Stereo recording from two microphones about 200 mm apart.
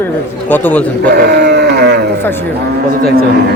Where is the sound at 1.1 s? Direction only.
55° right (ahead or behind).